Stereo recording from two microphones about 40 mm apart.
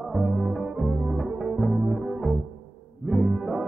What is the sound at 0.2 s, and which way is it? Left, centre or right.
Music, centre.